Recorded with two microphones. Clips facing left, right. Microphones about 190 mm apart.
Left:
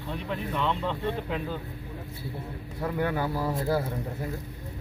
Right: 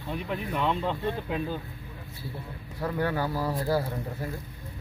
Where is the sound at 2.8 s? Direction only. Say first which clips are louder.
Even; 15° left (ahead or behind).